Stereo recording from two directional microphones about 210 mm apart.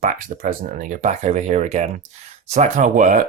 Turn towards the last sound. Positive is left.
turn(degrees=-40)  # may be behind; listen again after turning